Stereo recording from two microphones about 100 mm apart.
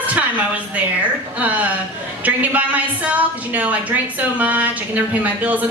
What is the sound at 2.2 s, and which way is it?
A woman's voice, 15° right (ahead or behind).